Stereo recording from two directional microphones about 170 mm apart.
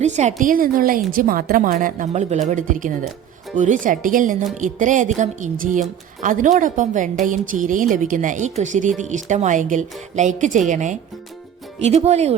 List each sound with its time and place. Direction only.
0.0 s a woman's voice: 45° right (ahead or behind)